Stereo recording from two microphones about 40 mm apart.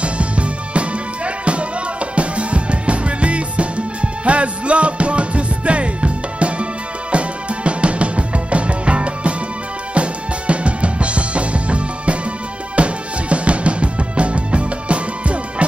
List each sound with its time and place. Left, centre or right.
0.0 s music: right